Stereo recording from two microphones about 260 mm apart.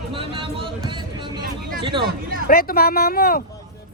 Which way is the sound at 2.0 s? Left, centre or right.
Right.